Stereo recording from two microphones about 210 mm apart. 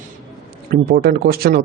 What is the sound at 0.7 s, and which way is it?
Speech, 45° right (ahead or behind).